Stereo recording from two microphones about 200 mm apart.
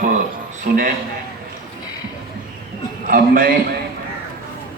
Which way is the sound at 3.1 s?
45° right (ahead or behind).